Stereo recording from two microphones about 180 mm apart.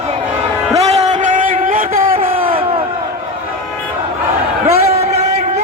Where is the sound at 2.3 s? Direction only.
30° right (ahead or behind).